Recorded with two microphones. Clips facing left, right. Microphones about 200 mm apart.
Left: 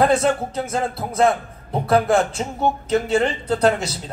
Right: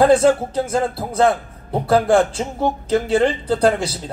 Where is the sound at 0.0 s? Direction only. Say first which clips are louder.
Right 4 dB; 30° right (ahead or behind).